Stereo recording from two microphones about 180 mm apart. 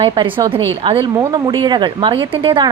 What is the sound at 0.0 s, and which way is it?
A woman's voice, 30° right (ahead or behind).